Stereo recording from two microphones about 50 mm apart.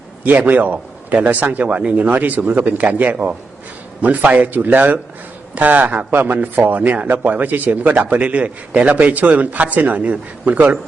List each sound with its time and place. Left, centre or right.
0.3 s speech: right
6.1 s speech: right